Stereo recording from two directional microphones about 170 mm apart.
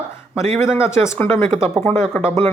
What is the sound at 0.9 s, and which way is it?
Speech, 15° left (ahead or behind).